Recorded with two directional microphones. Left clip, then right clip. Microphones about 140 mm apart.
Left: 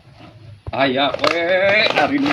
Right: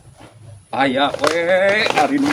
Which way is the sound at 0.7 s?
35° right (ahead or behind).